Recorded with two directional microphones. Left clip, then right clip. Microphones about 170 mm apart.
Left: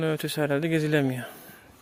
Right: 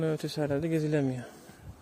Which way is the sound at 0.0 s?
10° left (ahead or behind).